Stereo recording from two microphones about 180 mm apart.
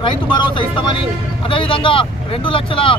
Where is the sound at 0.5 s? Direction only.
25° left (ahead or behind).